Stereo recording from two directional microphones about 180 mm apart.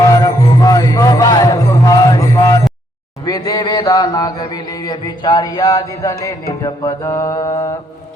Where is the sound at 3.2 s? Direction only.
20° left (ahead or behind).